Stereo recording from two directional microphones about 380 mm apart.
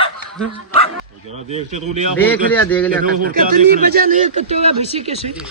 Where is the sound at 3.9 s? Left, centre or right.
Right.